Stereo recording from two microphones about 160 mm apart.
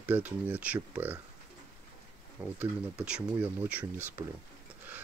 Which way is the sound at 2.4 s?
10° right (ahead or behind).